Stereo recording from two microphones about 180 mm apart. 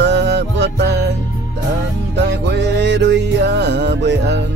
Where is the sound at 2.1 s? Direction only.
75° right (ahead or behind).